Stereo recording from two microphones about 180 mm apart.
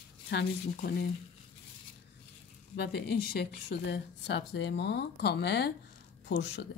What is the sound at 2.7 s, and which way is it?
A woman's voice, 65° left (ahead or behind).